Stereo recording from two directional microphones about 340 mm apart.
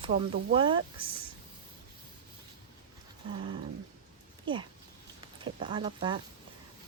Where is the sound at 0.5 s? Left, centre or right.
Centre.